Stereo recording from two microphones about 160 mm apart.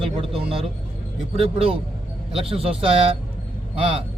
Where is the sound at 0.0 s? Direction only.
35° right (ahead or behind).